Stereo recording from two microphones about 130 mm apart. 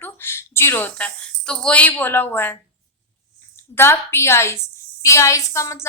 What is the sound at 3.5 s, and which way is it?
Speech, 20° left (ahead or behind).